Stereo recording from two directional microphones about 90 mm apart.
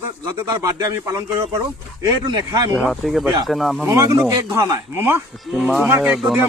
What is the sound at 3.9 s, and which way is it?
A man's voice, 35° right (ahead or behind).